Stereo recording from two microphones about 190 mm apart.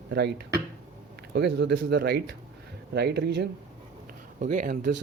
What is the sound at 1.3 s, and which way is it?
Speech, 65° right (ahead or behind).